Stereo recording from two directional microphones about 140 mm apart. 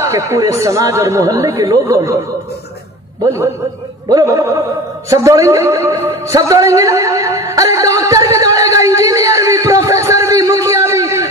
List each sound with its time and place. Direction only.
0.0 s speech: 20° right (ahead or behind)
4.1 s speech: 25° right (ahead or behind)
5.1 s a sound: 20° right (ahead or behind)